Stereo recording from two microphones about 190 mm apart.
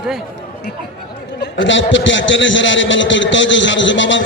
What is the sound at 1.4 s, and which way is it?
A man's voice, 75° left (ahead or behind).